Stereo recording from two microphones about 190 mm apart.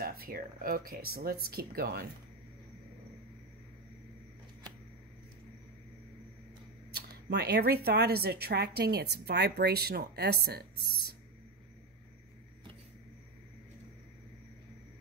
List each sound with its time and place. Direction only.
0.0 s speech: 50° right (ahead or behind)
6.9 s speech: 60° right (ahead or behind)